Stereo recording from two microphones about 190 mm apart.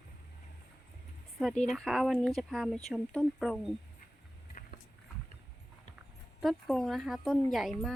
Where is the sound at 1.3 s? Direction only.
Centre (ahead or behind).